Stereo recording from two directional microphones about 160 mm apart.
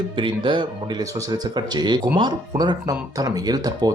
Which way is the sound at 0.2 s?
30° right (ahead or behind).